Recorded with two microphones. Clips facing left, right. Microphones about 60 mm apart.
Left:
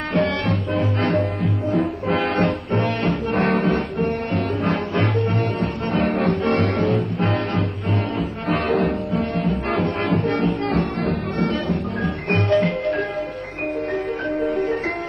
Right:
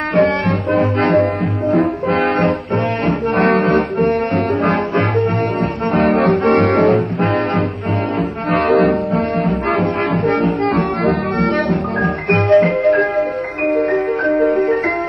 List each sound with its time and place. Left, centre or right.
0.1 s music: right
0.7 s music: right
3.3 s music: right
12.4 s music: right
13.7 s music: right